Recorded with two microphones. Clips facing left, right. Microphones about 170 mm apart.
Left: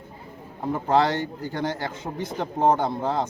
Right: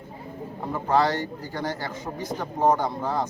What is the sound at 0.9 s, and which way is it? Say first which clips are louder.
A man's voice: left 1 dB; 25° left (ahead or behind).